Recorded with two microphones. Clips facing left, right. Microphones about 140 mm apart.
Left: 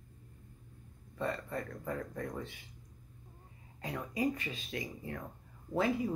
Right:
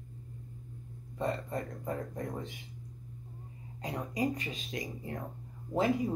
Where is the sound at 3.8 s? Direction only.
20° right (ahead or behind).